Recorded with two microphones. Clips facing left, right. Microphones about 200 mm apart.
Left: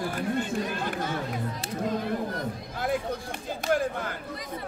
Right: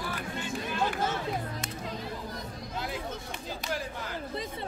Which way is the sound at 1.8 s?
55° left (ahead or behind).